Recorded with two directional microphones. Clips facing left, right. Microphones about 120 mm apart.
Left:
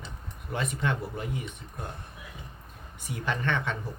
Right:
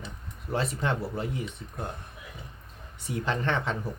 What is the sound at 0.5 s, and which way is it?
Speech, 30° right (ahead or behind).